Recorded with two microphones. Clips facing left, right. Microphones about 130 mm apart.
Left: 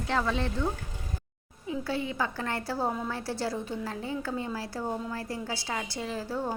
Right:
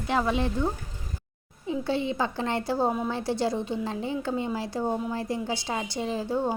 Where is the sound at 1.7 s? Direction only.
25° right (ahead or behind).